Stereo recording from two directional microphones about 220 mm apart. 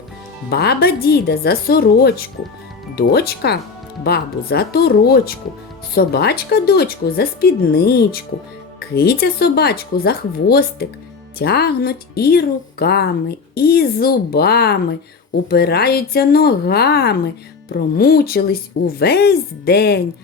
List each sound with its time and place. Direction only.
0.5 s speech: 45° left (ahead or behind)